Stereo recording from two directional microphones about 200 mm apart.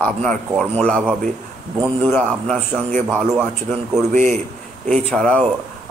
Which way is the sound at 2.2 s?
Centre (ahead or behind).